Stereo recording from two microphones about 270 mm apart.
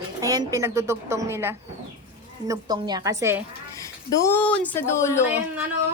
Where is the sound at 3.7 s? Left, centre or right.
Centre.